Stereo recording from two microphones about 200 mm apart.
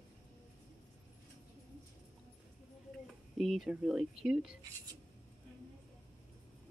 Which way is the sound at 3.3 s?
Centre (ahead or behind).